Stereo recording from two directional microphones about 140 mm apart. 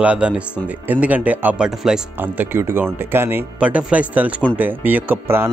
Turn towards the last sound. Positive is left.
turn(degrees=-15)  # may be behind; listen again after turning